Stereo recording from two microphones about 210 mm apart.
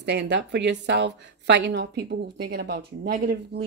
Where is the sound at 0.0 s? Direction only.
55° right (ahead or behind).